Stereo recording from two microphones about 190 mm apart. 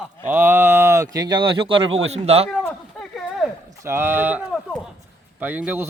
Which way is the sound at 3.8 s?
10° right (ahead or behind).